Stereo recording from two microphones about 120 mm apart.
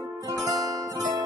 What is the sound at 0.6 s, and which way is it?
Music, 30° right (ahead or behind).